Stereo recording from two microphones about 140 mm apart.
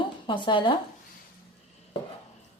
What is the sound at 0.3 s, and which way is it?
Speech, 35° left (ahead or behind).